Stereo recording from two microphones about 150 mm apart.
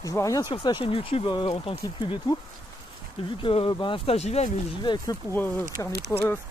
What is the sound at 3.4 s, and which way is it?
Speech, 35° left (ahead or behind).